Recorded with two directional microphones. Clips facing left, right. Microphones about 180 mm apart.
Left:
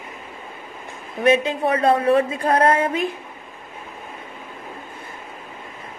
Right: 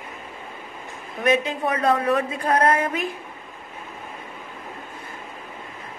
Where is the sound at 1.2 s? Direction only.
30° left (ahead or behind).